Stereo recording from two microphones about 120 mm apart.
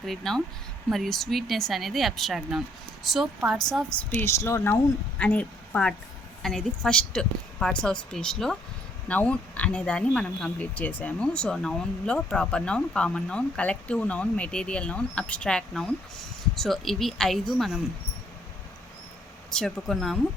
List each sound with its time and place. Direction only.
0.0 s speech: 5° left (ahead or behind)
4.1 s speech: 20° left (ahead or behind)
5.2 s speech: 10° left (ahead or behind)
19.5 s speech: 5° left (ahead or behind)